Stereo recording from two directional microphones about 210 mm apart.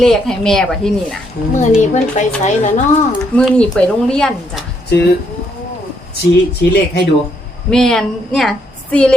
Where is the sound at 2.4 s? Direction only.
35° left (ahead or behind).